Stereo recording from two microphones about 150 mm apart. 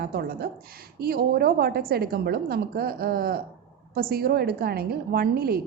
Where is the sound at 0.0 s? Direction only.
90° right.